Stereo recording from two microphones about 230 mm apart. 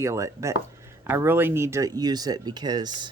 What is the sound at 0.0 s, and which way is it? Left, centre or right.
Speech, centre.